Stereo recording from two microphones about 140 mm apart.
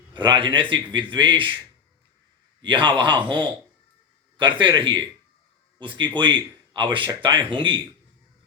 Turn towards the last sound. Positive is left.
turn(degrees=-35)  # may be behind; listen again after turning